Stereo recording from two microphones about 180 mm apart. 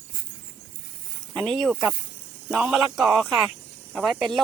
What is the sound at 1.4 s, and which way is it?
Speech, centre (ahead or behind).